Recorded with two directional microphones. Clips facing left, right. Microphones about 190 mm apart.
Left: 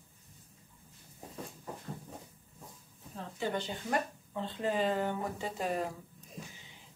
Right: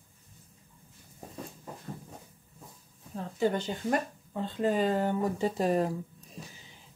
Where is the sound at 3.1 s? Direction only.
45° right (ahead or behind).